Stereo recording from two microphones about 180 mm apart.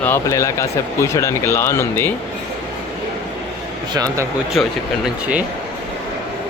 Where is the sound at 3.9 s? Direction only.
20° right (ahead or behind).